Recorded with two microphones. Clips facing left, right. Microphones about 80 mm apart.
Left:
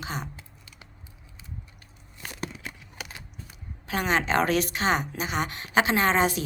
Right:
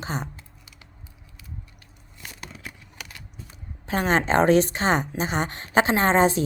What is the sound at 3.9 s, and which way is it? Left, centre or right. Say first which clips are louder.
A woman's voice: right 3 dB; right.